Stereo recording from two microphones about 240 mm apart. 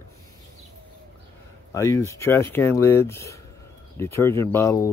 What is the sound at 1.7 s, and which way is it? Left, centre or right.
Speech, centre.